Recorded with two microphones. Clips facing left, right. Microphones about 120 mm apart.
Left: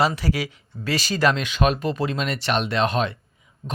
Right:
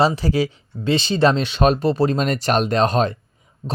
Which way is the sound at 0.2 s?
30° right (ahead or behind).